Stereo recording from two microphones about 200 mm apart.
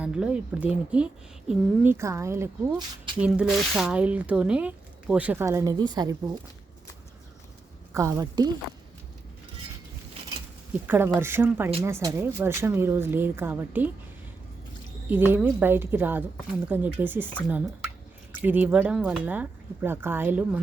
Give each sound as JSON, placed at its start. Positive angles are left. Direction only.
{"t": 0.0, "sound": "speech", "side_deg": -5}
{"t": 7.9, "sound": "speech", "side_deg": -15}
{"t": 10.8, "sound": "speech", "side_deg": -10}
{"t": 15.1, "sound": "speech", "side_deg": -10}
{"t": 18.4, "sound": "speech", "side_deg": -10}